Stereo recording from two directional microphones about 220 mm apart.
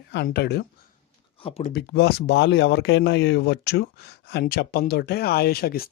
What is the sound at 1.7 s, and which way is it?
Speech, 45° left (ahead or behind).